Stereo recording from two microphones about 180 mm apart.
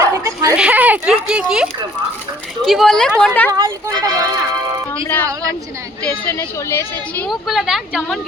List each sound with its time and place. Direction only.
0.1 s dog: 15° right (ahead or behind)
0.5 s speech: 5° right (ahead or behind)
3.5 s speech: 20° right (ahead or behind)
5.0 s speech: 10° left (ahead or behind)
7.3 s speech: centre (ahead or behind)